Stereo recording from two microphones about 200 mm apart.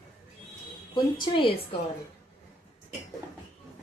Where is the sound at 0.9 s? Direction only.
20° left (ahead or behind).